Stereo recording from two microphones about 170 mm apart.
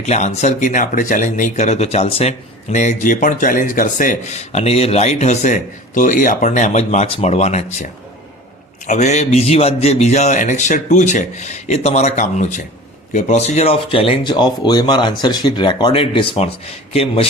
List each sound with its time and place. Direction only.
0.0 s speech: 45° left (ahead or behind)
8.9 s a man's voice: 45° left (ahead or behind)